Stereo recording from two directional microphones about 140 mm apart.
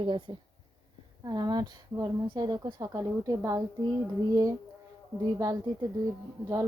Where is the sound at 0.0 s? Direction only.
35° right (ahead or behind).